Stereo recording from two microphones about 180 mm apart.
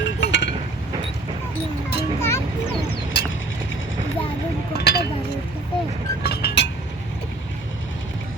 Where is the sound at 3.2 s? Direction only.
70° left (ahead or behind).